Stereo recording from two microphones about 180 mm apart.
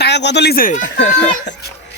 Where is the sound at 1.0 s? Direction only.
75° left (ahead or behind).